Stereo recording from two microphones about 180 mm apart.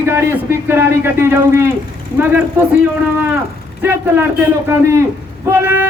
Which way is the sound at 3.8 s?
10° right (ahead or behind).